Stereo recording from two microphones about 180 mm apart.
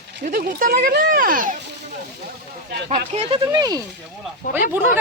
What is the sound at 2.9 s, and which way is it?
Speech, 35° right (ahead or behind).